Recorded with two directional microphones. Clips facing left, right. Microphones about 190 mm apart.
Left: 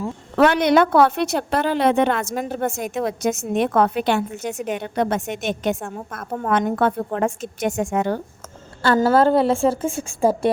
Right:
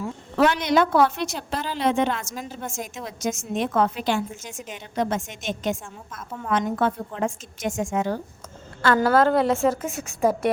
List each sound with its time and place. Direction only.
0.3 s a woman's voice: 60° left (ahead or behind)
8.8 s a woman's voice: 30° left (ahead or behind)